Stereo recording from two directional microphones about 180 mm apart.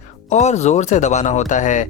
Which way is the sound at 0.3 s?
40° left (ahead or behind).